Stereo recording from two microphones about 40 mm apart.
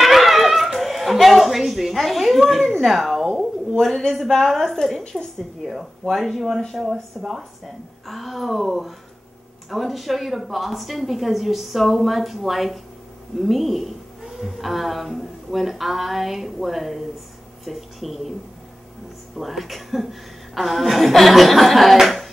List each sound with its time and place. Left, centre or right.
0.0 s a sound: centre
3.7 s a woman's voice: centre
5.1 s a woman's voice: right
5.6 s a woman's voice: centre
19.3 s a woman's voice: centre